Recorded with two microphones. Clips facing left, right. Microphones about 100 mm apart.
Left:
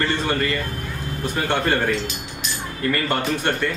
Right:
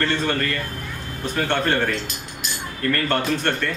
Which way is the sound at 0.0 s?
10° left (ahead or behind).